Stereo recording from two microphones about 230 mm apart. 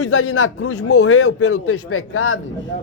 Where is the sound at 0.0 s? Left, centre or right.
Left.